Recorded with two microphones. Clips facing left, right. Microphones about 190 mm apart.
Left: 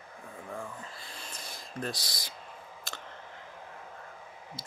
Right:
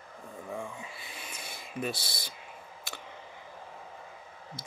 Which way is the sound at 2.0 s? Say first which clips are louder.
Right 1 dB; 25° right (ahead or behind).